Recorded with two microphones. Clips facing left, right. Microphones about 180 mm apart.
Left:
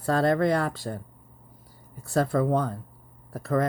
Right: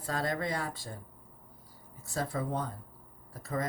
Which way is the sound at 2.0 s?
65° left (ahead or behind).